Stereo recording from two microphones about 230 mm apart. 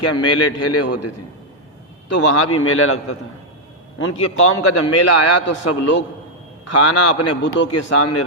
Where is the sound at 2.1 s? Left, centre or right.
Left.